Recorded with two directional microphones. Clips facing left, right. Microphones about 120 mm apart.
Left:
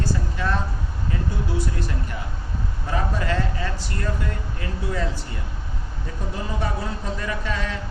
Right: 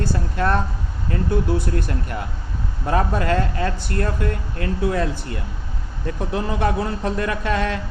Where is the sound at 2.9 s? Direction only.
55° right (ahead or behind).